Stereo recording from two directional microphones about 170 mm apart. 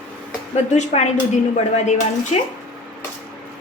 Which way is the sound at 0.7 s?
40° left (ahead or behind).